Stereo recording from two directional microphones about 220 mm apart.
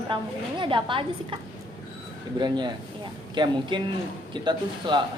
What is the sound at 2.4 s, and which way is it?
A woman's voice, 20° right (ahead or behind).